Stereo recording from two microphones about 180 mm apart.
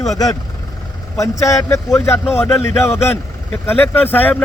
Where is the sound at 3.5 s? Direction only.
10° left (ahead or behind).